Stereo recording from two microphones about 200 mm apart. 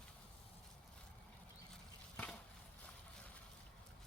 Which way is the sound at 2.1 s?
5° left (ahead or behind).